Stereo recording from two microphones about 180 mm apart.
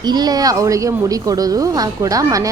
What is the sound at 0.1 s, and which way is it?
A woman's voice, 20° right (ahead or behind).